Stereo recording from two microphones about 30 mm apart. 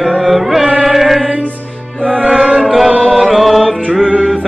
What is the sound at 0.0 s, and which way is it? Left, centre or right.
Music, centre.